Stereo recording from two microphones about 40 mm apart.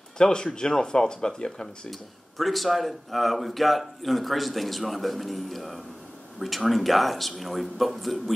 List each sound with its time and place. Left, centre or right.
0.2 s speech: centre
1.9 s speech: centre